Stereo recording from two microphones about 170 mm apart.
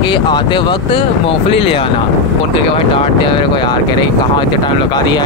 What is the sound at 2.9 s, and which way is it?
Speech, 30° left (ahead or behind).